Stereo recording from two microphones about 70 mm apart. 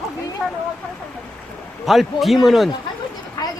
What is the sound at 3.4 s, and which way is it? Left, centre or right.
Vehicle, left.